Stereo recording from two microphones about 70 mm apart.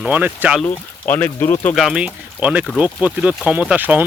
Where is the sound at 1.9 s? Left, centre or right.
Right.